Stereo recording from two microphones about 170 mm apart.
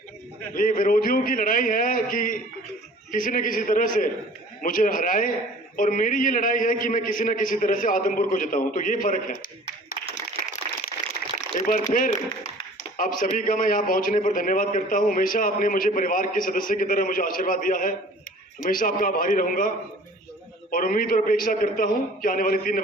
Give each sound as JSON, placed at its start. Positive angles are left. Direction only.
{"t": 0.5, "sound": "a man's voice", "side_deg": 55}
{"t": 11.6, "sound": "a sound", "side_deg": 50}
{"t": 13.3, "sound": "a man's voice", "side_deg": 55}